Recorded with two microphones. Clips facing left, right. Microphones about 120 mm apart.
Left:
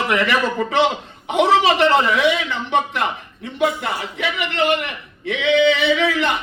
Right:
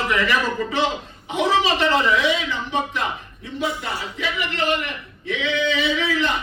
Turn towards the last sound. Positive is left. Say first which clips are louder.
# left 4 dB
turn(degrees=65)  # may be behind; listen again after turning